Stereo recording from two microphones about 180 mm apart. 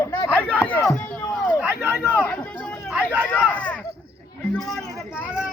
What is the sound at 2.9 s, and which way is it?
Speech, 10° right (ahead or behind).